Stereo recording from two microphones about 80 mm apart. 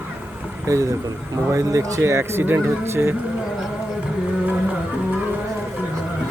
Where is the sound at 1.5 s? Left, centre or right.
Right.